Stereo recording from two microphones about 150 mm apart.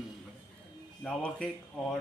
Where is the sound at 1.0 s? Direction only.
5° left (ahead or behind).